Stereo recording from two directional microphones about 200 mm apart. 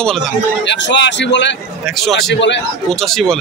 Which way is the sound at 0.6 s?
65° left (ahead or behind).